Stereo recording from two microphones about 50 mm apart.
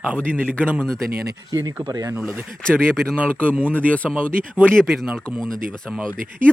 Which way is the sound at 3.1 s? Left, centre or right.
Right.